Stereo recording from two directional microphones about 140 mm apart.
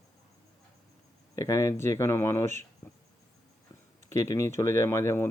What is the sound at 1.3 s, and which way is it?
Speech, 20° left (ahead or behind).